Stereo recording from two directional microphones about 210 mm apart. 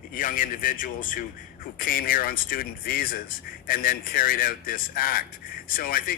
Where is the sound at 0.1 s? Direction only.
40° left (ahead or behind).